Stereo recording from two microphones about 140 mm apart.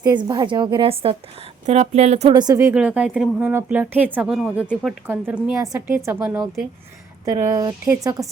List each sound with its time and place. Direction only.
0.2 s a woman's voice: 35° right (ahead or behind)
1.6 s speech: 50° right (ahead or behind)
2.3 s speech: 30° right (ahead or behind)
2.7 s speech: 10° right (ahead or behind)
7.3 s speech: 25° right (ahead or behind)